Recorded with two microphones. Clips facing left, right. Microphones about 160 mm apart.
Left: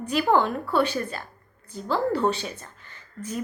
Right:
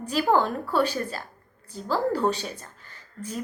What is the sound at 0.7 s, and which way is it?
A woman's voice, 35° right (ahead or behind).